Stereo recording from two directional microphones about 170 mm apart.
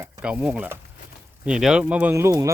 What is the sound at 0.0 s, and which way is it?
Speech, 5° right (ahead or behind).